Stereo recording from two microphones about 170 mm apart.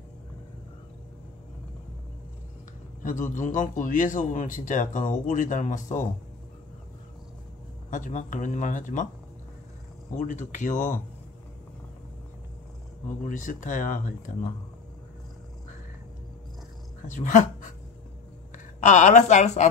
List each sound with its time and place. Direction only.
3.0 s a man's voice: 50° left (ahead or behind)
7.9 s a man's voice: 45° left (ahead or behind)
10.1 s a man's voice: 45° left (ahead or behind)
13.2 s a man's voice: 50° left (ahead or behind)
17.1 s speech: 45° left (ahead or behind)
18.8 s a man's voice: 45° left (ahead or behind)